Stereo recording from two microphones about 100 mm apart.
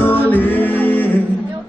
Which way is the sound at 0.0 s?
20° left (ahead or behind).